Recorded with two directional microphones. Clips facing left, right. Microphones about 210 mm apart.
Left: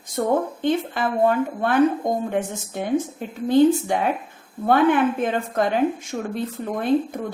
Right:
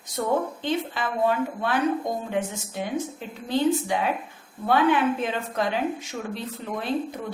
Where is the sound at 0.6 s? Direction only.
50° left (ahead or behind).